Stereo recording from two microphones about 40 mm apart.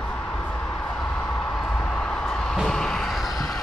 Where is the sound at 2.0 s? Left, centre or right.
Left.